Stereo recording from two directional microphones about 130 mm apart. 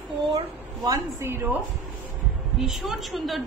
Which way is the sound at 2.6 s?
Centre (ahead or behind).